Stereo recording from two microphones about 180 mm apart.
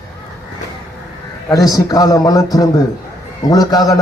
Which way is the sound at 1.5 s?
20° left (ahead or behind).